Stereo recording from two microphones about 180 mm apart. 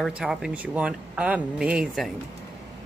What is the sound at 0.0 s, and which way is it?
Speech, 5° right (ahead or behind).